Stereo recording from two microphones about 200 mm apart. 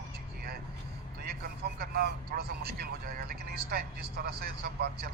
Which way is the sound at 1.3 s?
50° right (ahead or behind).